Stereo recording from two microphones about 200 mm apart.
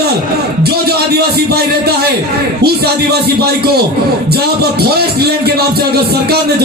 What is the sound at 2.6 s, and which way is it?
Speech, 50° right (ahead or behind).